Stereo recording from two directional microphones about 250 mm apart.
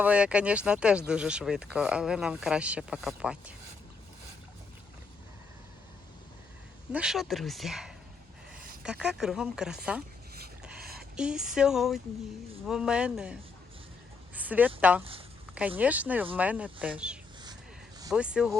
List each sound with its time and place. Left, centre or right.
0.0 s speech: centre
6.9 s speech: centre
10.3 s a sound: right
11.2 s speech: centre
14.3 s a sound: centre
14.8 s speech: centre